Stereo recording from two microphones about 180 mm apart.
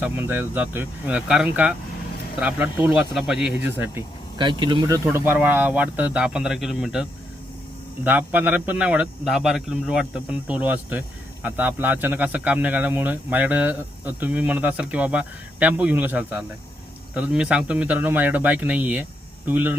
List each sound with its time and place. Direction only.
0.0 s a man's voice: 10° right (ahead or behind)
4.4 s speech: 25° right (ahead or behind)
5.0 s a man's voice: 10° right (ahead or behind)